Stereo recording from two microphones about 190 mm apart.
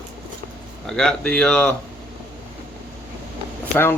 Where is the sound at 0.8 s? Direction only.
5° left (ahead or behind).